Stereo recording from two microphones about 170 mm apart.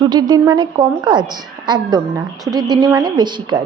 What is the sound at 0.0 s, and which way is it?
A woman's voice, 25° right (ahead or behind).